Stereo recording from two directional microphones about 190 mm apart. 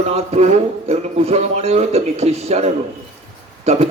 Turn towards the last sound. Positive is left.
turn(degrees=-35)  # may be behind; listen again after turning